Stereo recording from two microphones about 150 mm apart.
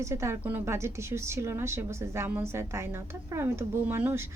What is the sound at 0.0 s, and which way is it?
A woman's voice, 20° right (ahead or behind).